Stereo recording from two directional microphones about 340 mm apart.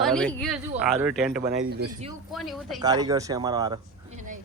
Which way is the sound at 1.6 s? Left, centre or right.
Right.